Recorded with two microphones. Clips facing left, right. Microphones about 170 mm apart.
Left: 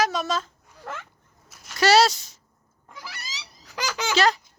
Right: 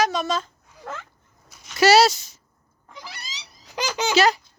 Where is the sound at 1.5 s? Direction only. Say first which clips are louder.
Right 3 dB; centre (ahead or behind).